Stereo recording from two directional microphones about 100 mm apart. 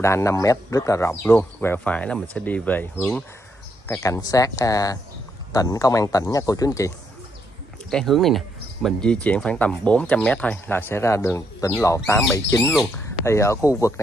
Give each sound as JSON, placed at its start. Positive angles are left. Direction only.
{"t": 0.0, "sound": "speech", "side_deg": 30}
{"t": 1.2, "sound": "speech", "side_deg": 20}
{"t": 3.8, "sound": "speech", "side_deg": 30}
{"t": 7.9, "sound": "speech", "side_deg": 0}